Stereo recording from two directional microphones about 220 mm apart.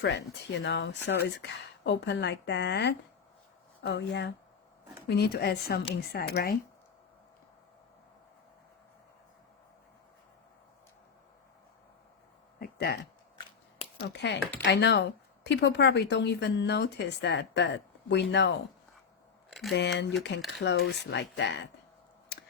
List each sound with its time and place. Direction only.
0.6 s a woman's voice: 50° left (ahead or behind)
12.5 s a sound: 45° left (ahead or behind)
14.0 s a woman's voice: 50° left (ahead or behind)
19.7 s a woman's voice: 55° left (ahead or behind)
22.3 s mechanisms: 50° left (ahead or behind)